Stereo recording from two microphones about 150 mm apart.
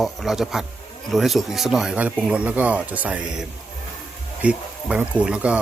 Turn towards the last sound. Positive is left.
turn(degrees=-5)  # may be behind; listen again after turning